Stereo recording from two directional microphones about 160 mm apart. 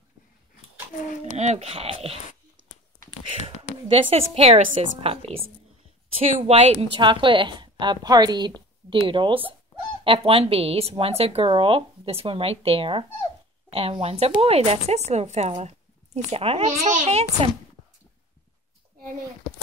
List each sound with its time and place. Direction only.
1.3 s a woman's voice: 45° right (ahead or behind)
3.9 s a woman's voice: 35° right (ahead or behind)